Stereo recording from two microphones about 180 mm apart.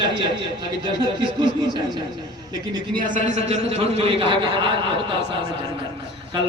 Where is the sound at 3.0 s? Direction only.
45° right (ahead or behind).